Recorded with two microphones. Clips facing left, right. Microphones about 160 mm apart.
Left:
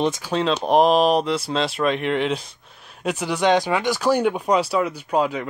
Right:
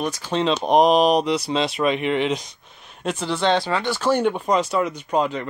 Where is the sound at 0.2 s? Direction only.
5° left (ahead or behind).